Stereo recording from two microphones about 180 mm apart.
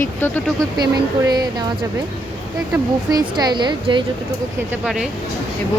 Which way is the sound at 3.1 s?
20° right (ahead or behind).